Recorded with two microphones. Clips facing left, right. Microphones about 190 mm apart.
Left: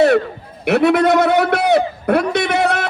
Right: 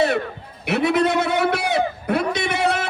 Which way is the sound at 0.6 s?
60° left (ahead or behind).